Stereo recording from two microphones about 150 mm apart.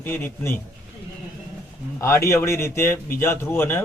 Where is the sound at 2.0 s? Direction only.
20° left (ahead or behind).